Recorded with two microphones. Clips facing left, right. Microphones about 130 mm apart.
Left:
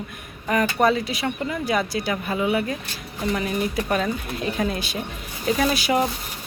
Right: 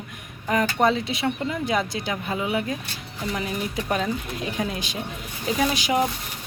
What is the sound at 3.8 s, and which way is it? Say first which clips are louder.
Speech: left 2 dB; 15° right (ahead or behind).